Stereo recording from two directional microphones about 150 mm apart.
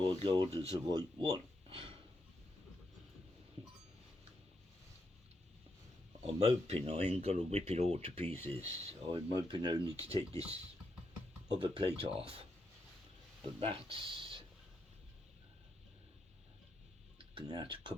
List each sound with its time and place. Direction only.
0.1 s speech: 30° right (ahead or behind)
0.5 s speech: 20° left (ahead or behind)
0.9 s speech: 30° right (ahead or behind)
6.2 s speech: 45° right (ahead or behind)
8.3 s speech: 10° left (ahead or behind)
8.5 s speech: 45° right (ahead or behind)
9.1 s speech: 30° right (ahead or behind)
10.1 s speech: 45° right (ahead or behind)
11.5 s speech: 30° right (ahead or behind)
13.6 s speech: 35° right (ahead or behind)
17.2 s speech: 30° right (ahead or behind)